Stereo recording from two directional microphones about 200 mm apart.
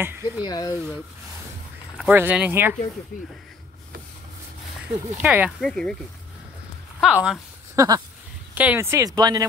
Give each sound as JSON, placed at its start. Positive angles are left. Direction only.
{"t": 0.0, "sound": "speech", "side_deg": -10}
{"t": 0.5, "sound": "speech", "side_deg": 20}
{"t": 2.0, "sound": "speech", "side_deg": -5}
{"t": 5.2, "sound": "speech", "side_deg": -5}
{"t": 5.6, "sound": "speech", "side_deg": 5}
{"t": 7.0, "sound": "speech", "side_deg": -5}
{"t": 7.7, "sound": "speech", "side_deg": -15}